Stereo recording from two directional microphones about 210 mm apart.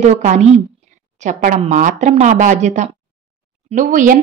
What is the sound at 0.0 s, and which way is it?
Speech, 35° right (ahead or behind).